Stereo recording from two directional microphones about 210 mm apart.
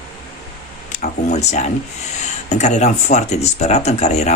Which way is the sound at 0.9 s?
35° left (ahead or behind).